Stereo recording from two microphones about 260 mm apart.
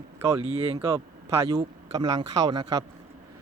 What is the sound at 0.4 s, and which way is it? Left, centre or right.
Speech, right.